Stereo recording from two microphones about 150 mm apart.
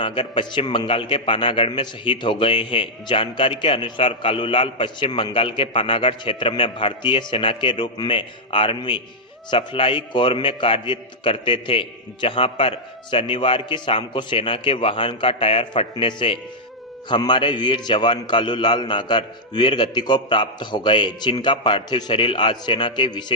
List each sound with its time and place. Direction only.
0.0 s a man's voice: 35° left (ahead or behind)